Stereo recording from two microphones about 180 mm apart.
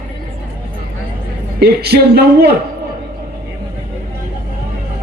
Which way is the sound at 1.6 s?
60° right (ahead or behind).